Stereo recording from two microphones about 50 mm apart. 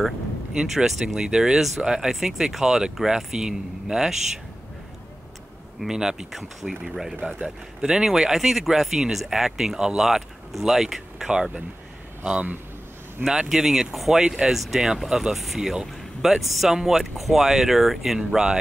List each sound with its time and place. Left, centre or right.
0.5 s speech: centre
5.8 s speech: centre
7.2 s speech: centre
11.2 s speech: centre
13.2 s speech: centre